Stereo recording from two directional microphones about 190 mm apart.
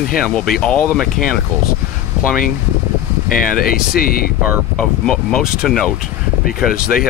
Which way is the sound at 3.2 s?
50° left (ahead or behind).